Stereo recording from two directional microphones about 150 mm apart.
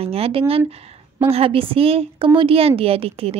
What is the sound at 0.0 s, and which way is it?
A woman's voice, 40° right (ahead or behind).